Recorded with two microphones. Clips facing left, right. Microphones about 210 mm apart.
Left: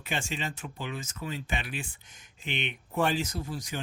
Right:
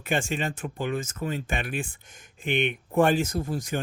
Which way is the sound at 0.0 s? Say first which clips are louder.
Right 7 dB; 50° right (ahead or behind).